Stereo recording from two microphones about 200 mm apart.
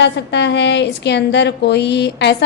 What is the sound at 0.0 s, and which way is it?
A woman's voice, 60° left (ahead or behind).